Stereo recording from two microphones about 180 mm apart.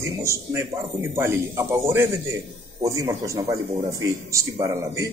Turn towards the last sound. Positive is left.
turn(degrees=-15)  # may be behind; listen again after turning